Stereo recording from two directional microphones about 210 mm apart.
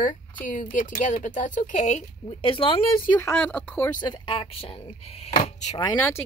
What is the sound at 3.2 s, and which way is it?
Speech, 10° left (ahead or behind).